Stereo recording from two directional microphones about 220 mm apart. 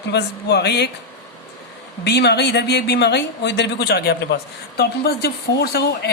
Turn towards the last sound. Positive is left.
turn(degrees=45)  # may be behind; listen again after turning